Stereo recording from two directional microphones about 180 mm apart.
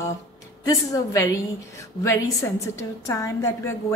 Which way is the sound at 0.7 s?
15° left (ahead or behind).